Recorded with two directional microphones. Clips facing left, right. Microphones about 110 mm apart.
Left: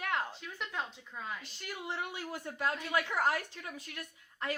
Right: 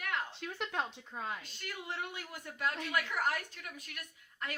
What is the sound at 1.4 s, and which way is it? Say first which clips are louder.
A woman's voice: left 2 dB; 25° left (ahead or behind).